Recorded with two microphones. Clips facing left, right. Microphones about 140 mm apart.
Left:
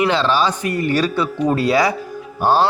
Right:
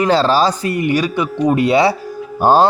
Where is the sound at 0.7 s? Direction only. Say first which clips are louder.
Right 2 dB; 15° right (ahead or behind).